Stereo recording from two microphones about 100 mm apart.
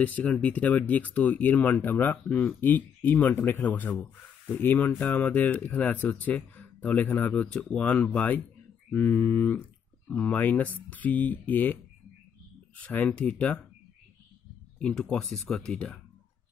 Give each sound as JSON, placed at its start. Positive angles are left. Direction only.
{"t": 0.0, "sound": "speech", "side_deg": 15}
{"t": 14.8, "sound": "speech", "side_deg": 10}